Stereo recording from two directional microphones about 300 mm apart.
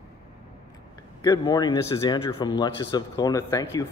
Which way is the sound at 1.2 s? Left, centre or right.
Centre.